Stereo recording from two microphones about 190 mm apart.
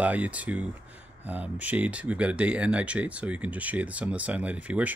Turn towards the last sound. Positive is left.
turn(degrees=-5)  # may be behind; listen again after turning